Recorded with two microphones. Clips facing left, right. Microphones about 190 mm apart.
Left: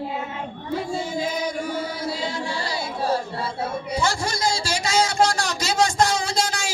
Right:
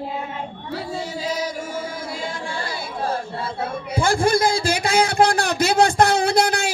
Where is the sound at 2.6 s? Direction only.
50° right (ahead or behind).